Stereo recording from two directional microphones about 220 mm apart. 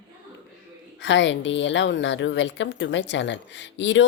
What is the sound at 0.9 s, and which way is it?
A woman's voice, 55° left (ahead or behind).